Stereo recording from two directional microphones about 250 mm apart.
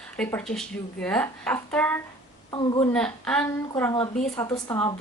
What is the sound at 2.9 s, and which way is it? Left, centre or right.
A woman's voice, centre.